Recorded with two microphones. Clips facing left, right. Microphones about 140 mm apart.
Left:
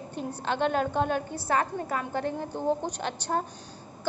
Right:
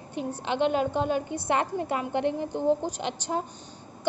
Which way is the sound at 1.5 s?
25° right (ahead or behind).